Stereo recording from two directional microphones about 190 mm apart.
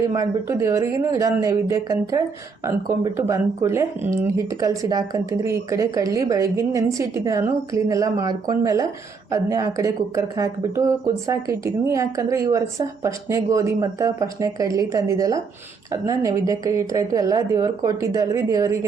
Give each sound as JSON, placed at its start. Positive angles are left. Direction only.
{"t": 0.1, "sound": "speech", "side_deg": -15}